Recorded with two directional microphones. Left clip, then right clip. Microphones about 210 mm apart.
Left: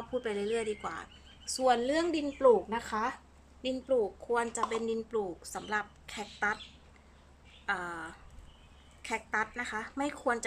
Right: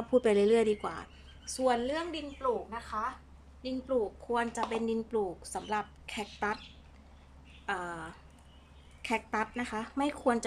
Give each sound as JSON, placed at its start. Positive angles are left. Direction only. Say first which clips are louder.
{"t": 0.1, "sound": "speech", "louder": "right 8 dB", "side_deg": -20}
{"t": 1.4, "sound": "a woman's voice", "louder": "left 2 dB", "side_deg": 5}
{"t": 2.4, "sound": "a woman's voice", "louder": "left 8 dB", "side_deg": 45}
{"t": 3.6, "sound": "a woman's voice", "louder": "left 2 dB", "side_deg": 5}
{"t": 7.6, "sound": "a woman's voice", "louder": "left 1 dB", "side_deg": -5}